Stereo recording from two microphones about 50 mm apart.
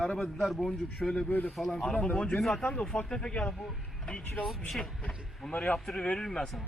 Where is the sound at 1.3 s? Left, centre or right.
Left.